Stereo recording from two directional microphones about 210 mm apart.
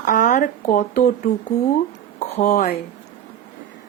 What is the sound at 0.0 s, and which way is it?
Speech, 35° left (ahead or behind).